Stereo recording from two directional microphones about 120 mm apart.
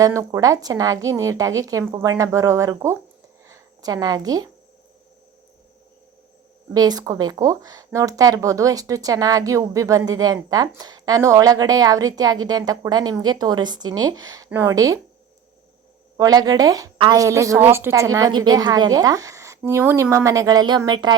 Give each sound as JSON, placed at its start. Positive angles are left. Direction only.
{"t": 0.0, "sound": "a woman's voice", "side_deg": -25}
{"t": 3.4, "sound": "a sound", "side_deg": -30}
{"t": 6.7, "sound": "a woman's voice", "side_deg": -30}
{"t": 14.5, "sound": "a woman's voice", "side_deg": -15}
{"t": 16.1, "sound": "a woman's voice", "side_deg": -30}